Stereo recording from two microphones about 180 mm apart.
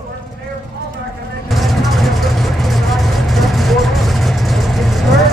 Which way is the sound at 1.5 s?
Centre (ahead or behind).